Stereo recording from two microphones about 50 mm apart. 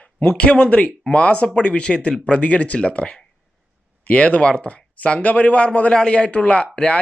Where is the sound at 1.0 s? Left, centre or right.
Left.